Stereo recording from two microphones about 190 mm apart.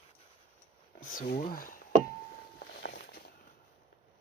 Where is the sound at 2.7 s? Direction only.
50° left (ahead or behind).